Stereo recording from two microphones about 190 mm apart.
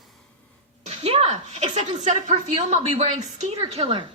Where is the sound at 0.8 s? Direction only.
35° right (ahead or behind).